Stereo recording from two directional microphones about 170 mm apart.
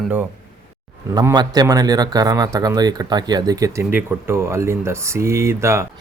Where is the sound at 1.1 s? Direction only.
25° right (ahead or behind).